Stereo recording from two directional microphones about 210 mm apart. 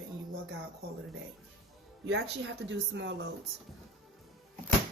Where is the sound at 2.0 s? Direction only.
75° right (ahead or behind).